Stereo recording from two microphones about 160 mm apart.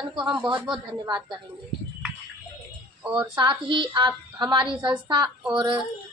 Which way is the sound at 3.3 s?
30° right (ahead or behind).